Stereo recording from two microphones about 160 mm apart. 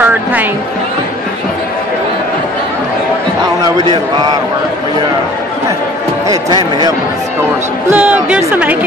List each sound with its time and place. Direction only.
0.0 s music: 10° right (ahead or behind)
3.6 s speech: 25° right (ahead or behind)
6.2 s speech: 25° right (ahead or behind)
7.9 s a woman's voice: 10° right (ahead or behind)